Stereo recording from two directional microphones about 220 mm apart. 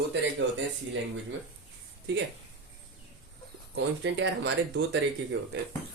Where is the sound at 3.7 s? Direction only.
55° right (ahead or behind).